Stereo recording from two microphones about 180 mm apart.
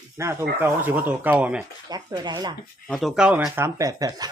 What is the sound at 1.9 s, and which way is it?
Speech, 25° right (ahead or behind).